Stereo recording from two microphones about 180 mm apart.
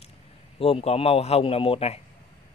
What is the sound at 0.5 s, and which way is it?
Speech, 30° left (ahead or behind).